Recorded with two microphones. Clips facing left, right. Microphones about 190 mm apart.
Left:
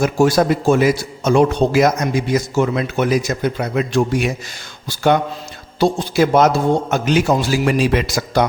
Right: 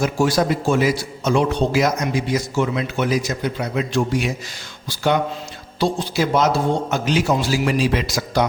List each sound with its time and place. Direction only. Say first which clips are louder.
0.0 s a man's voice: left 4 dB; 50° left (ahead or behind)
5.8 s a man's voice: left 5 dB; 55° left (ahead or behind)